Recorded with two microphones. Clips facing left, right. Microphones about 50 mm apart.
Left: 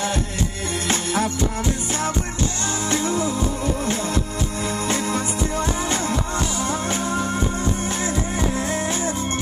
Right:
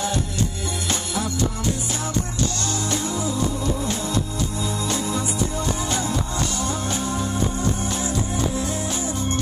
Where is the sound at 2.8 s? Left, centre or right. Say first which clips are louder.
Left 5 dB; left.